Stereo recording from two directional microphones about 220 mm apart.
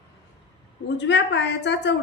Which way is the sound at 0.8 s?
55° left (ahead or behind).